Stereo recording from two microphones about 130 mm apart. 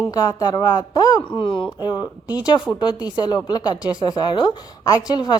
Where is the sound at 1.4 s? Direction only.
40° left (ahead or behind).